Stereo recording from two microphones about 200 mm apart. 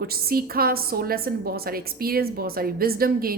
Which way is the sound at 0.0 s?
50° right (ahead or behind).